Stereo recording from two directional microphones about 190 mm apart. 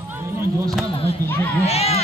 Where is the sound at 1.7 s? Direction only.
35° left (ahead or behind).